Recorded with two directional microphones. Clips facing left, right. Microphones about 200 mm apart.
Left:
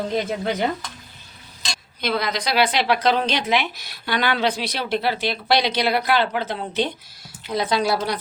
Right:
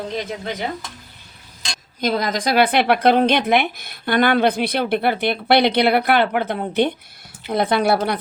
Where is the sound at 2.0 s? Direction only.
45° right (ahead or behind).